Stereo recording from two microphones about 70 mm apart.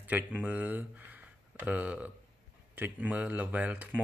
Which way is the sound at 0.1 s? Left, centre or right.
Centre.